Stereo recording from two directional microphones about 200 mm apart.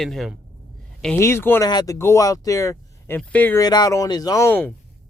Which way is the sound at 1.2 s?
10° left (ahead or behind).